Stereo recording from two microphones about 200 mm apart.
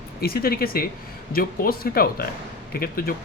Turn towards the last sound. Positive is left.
turn(degrees=45)  # may be behind; listen again after turning